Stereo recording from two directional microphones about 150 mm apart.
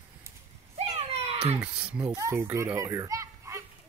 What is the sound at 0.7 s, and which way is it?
Children playing, 40° right (ahead or behind).